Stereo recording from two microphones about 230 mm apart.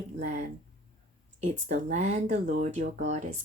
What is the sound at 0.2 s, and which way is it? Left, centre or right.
Speech, right.